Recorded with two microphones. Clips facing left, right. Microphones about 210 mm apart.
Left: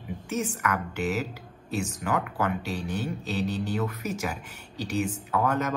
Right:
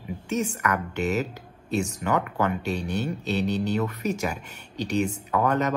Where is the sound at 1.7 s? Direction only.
5° left (ahead or behind).